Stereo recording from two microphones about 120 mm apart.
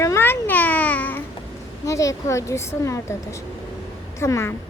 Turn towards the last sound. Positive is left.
turn(degrees=20)  # may be behind; listen again after turning